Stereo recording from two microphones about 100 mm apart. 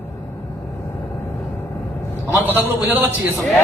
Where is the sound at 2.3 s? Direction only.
20° right (ahead or behind).